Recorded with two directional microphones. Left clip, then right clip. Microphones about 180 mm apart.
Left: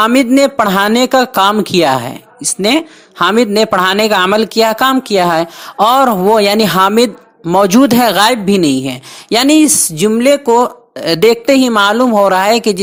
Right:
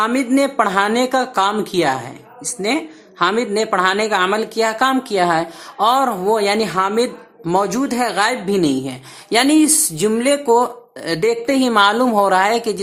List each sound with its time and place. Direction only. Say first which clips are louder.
0.0 s speech: left 7 dB; 40° left (ahead or behind)